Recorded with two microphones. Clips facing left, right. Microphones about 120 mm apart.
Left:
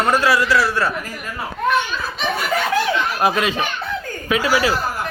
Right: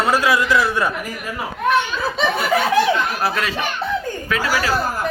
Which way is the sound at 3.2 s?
15° left (ahead or behind).